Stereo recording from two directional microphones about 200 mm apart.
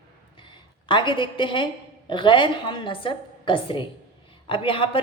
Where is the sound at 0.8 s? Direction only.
25° left (ahead or behind).